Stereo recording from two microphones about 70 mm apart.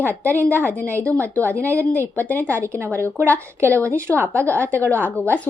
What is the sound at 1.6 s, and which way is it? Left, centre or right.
Speech, right.